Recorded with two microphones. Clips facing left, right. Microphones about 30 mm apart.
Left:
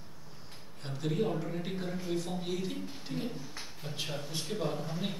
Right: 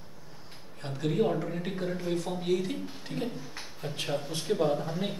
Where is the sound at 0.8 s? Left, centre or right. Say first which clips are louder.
Right 5 dB; centre.